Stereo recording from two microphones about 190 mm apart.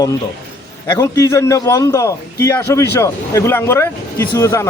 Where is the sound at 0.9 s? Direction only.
15° left (ahead or behind).